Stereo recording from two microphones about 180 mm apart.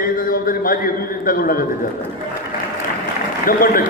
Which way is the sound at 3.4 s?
50° left (ahead or behind).